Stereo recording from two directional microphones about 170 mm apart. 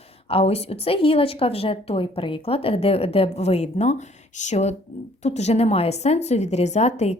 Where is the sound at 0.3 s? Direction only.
35° left (ahead or behind).